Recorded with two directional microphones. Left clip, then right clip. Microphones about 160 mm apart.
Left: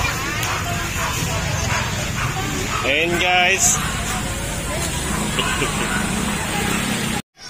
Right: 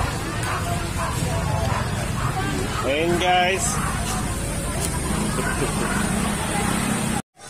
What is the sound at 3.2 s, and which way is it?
Speech, 15° right (ahead or behind).